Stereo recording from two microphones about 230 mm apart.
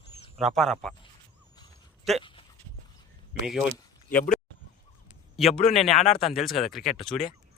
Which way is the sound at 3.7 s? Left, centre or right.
Centre.